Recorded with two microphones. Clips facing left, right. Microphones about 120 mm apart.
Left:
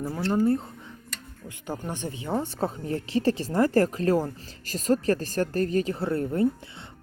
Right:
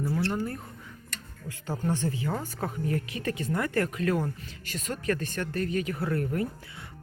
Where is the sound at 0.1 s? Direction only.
20° left (ahead or behind).